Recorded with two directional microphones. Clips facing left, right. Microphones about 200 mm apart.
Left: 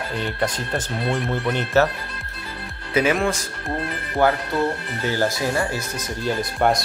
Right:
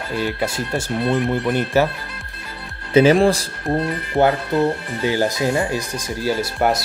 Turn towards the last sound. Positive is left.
turn(degrees=-5)  # may be behind; listen again after turning